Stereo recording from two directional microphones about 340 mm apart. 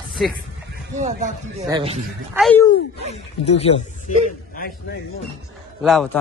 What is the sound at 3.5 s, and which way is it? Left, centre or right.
Speech, centre.